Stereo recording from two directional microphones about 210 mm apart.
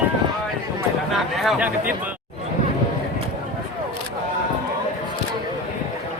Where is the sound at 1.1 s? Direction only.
Centre (ahead or behind).